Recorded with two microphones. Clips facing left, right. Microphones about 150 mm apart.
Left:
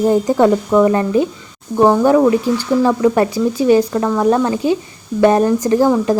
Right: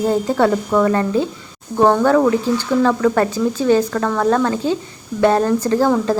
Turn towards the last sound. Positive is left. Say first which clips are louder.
# left 3 dB
turn(degrees=15)  # may be behind; listen again after turning